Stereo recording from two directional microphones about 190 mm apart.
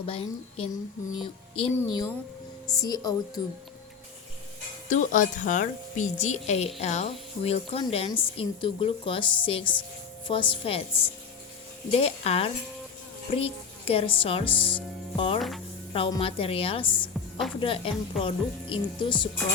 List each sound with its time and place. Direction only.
0.0 s a woman's voice: 30° left (ahead or behind)
4.9 s a woman's voice: 40° left (ahead or behind)
15.4 s speech: centre (ahead or behind)
15.9 s a woman's voice: 25° left (ahead or behind)